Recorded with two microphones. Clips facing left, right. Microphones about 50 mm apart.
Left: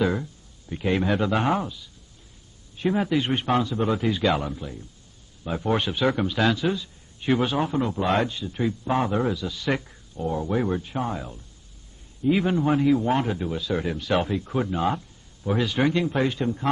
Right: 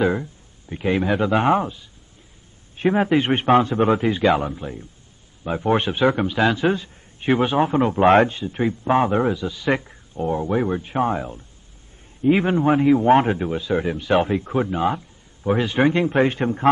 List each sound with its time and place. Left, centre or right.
0.0 s a sound: right
0.9 s speech: centre
1.3 s a man's voice: right
6.0 s speech: centre
6.5 s a man's voice: right